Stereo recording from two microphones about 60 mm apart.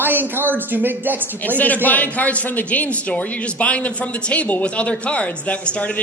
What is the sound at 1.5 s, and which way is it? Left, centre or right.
A man's voice, left.